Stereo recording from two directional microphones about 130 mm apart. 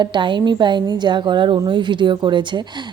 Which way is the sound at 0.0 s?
35° right (ahead or behind).